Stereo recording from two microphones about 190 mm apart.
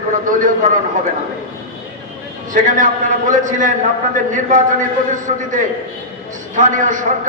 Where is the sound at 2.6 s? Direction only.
40° right (ahead or behind).